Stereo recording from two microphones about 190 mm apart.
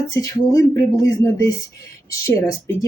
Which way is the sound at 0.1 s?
15° left (ahead or behind).